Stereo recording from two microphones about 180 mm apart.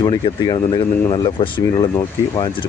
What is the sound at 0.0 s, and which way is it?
Speech, 25° left (ahead or behind).